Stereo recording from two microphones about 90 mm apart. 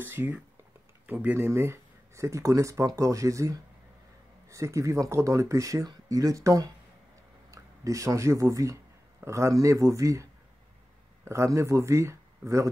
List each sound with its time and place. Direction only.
0.0 s speech: 25° right (ahead or behind)
11.2 s speech: 30° right (ahead or behind)